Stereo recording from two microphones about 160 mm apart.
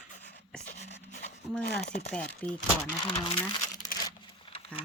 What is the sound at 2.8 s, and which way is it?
Speech, 20° left (ahead or behind).